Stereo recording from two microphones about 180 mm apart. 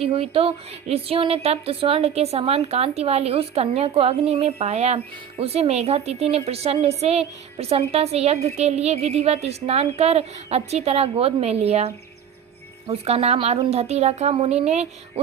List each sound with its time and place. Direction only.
0.0 s a woman's voice: 35° right (ahead or behind)